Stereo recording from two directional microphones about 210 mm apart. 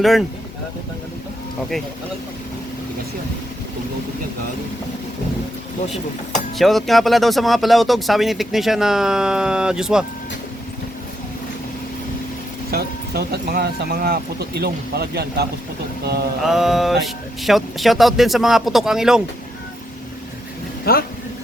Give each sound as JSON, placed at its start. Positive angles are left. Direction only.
{"t": 0.0, "sound": "speech", "side_deg": 0}
{"t": 5.9, "sound": "speech", "side_deg": 0}
{"t": 12.7, "sound": "speech", "side_deg": -50}
{"t": 16.5, "sound": "speech", "side_deg": 0}
{"t": 20.9, "sound": "speech", "side_deg": 45}